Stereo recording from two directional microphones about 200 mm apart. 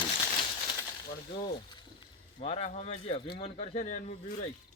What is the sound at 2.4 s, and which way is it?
Speech, 30° left (ahead or behind).